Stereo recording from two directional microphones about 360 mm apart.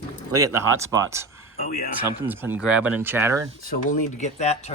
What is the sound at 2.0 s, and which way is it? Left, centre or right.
Speech, centre.